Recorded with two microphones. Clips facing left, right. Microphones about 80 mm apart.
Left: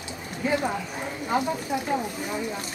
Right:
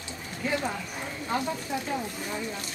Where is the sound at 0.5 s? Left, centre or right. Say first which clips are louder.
Left 4 dB; centre.